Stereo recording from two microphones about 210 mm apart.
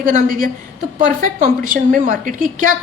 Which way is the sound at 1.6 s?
40° right (ahead or behind).